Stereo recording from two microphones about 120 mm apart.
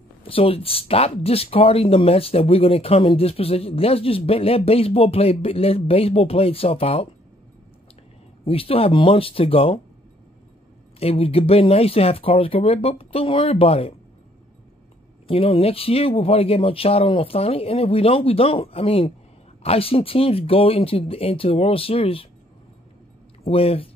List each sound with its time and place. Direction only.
0.2 s speech: 50° left (ahead or behind)
8.5 s speech: 50° left (ahead or behind)
11.0 s speech: 55° left (ahead or behind)
15.2 s speech: 50° left (ahead or behind)
23.4 s speech: 55° left (ahead or behind)